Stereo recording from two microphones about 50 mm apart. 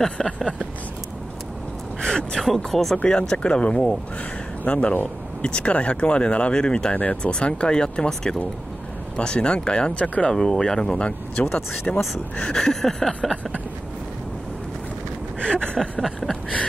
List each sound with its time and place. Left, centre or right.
0.0 s speech: centre
2.0 s speech: centre
3.1 s speech: centre
10.0 s speech: left
10.3 s speech: centre
12.6 s speech: centre
15.4 s a sound: centre
15.8 s speech: centre